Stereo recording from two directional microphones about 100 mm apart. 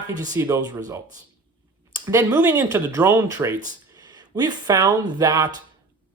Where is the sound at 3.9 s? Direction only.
40° right (ahead or behind).